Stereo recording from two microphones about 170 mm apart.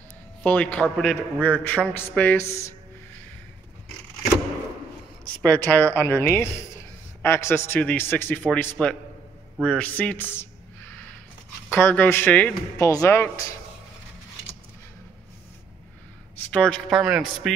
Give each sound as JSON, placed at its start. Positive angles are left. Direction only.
{"t": 0.4, "sound": "a man's voice", "side_deg": 10}
{"t": 5.2, "sound": "a man's voice", "side_deg": 10}
{"t": 11.7, "sound": "a man's voice", "side_deg": 10}
{"t": 12.8, "sound": "speech", "side_deg": 20}
{"t": 16.5, "sound": "speech", "side_deg": 5}